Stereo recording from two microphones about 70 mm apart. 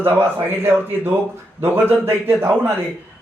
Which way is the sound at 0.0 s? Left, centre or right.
Right.